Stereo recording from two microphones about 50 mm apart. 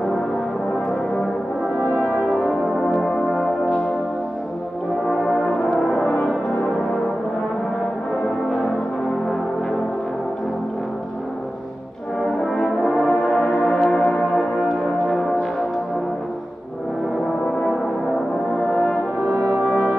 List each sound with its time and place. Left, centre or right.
2.3 s brass instrument: centre
3.0 s music: centre
5.2 s brass instrument: centre
12.5 s brass instrument: centre
13.8 s music: centre
18.8 s brass instrument: left
19.7 s music: left